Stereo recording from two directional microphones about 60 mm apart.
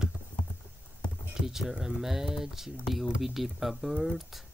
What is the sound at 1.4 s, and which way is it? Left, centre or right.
Speech, centre.